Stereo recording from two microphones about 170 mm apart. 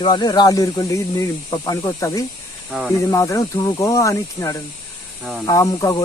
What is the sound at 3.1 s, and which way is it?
Speech, 20° left (ahead or behind).